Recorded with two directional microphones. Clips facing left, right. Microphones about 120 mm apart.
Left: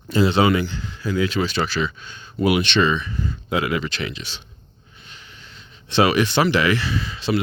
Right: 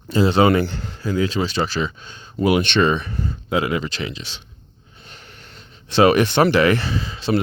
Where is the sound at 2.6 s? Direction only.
50° right (ahead or behind).